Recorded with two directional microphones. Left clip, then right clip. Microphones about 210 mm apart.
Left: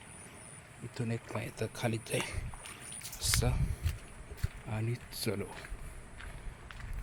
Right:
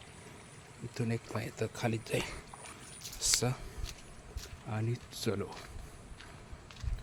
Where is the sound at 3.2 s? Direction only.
10° right (ahead or behind).